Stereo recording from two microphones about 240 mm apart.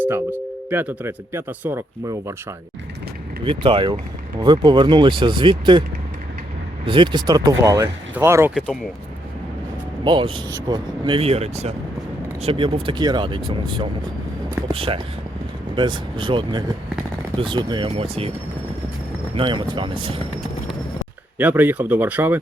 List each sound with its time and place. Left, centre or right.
0.0 s speech: centre
3.4 s speech: right
6.8 s speech: right; by 8.8 s centre
10.0 s speech: centre
19.4 s speech: centre
21.3 s speech: centre